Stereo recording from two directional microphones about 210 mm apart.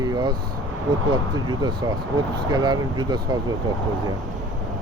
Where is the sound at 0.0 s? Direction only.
20° right (ahead or behind).